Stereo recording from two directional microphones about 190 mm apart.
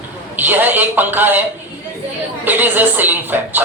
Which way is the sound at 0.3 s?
10° right (ahead or behind).